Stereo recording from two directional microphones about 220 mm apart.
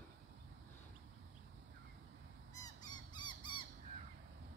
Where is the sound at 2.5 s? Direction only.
15° left (ahead or behind).